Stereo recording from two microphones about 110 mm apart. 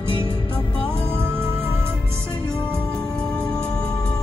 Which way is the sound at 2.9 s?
10° left (ahead or behind).